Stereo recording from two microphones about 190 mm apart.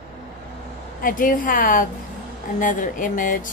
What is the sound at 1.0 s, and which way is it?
A woman's voice, 45° left (ahead or behind).